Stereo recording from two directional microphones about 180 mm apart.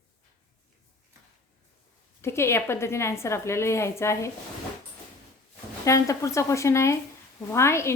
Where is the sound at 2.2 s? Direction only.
15° left (ahead or behind).